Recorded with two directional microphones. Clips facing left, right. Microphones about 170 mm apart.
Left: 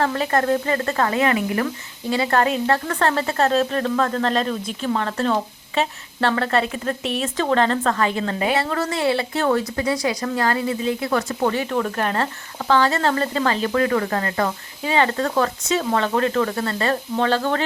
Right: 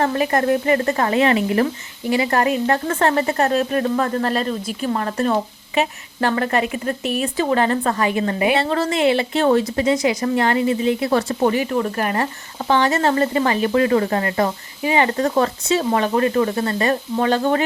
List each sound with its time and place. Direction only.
0.0 s speech: 15° right (ahead or behind)
2.0 s speech: 15° right (ahead or behind)
2.7 s speech: 20° right (ahead or behind)
8.5 s a woman's voice: 25° right (ahead or behind)
11.3 s speech: 15° right (ahead or behind)
16.0 s speech: 15° right (ahead or behind)